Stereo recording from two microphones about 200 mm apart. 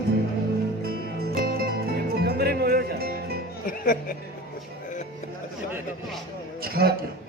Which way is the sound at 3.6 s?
45° left (ahead or behind).